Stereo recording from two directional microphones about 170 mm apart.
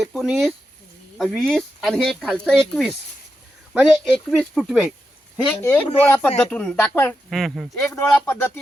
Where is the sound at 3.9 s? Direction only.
Centre (ahead or behind).